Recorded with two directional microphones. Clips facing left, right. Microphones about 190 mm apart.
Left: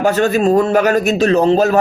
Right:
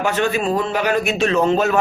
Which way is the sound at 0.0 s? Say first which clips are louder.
Left 6 dB; 40° left (ahead or behind).